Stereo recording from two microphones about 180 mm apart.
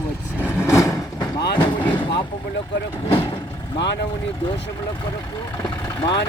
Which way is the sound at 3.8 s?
70° left (ahead or behind).